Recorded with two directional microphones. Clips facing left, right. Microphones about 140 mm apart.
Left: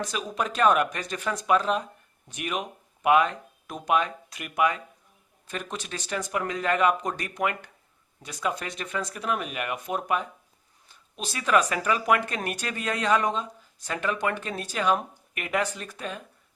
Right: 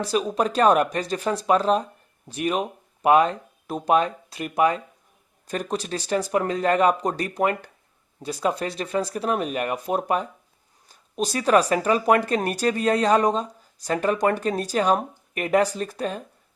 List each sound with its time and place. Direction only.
0.0 s speech: 35° right (ahead or behind)